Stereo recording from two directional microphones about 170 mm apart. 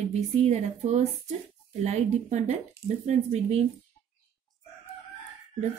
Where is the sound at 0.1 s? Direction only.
40° right (ahead or behind).